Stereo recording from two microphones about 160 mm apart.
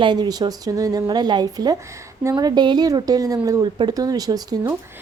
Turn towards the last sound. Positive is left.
turn(degrees=-25)  # may be behind; listen again after turning